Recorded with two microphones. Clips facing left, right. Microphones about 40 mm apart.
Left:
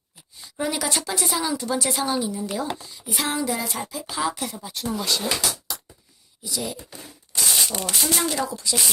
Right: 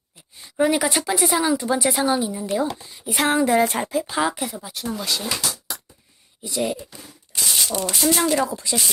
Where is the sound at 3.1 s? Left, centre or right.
Right.